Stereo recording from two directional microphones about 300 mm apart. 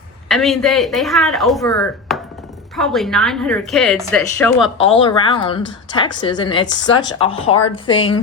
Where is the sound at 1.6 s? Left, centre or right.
Centre.